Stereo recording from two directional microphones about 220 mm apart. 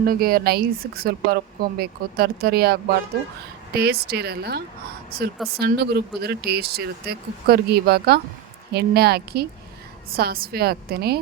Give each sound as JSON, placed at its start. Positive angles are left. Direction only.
{"t": 0.0, "sound": "speech", "side_deg": -40}